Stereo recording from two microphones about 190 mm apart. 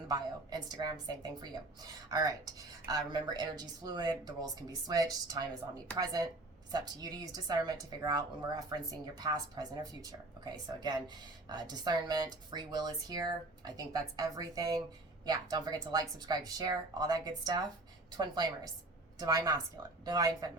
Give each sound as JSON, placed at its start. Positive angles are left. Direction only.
{"t": 0.1, "sound": "speech", "side_deg": -20}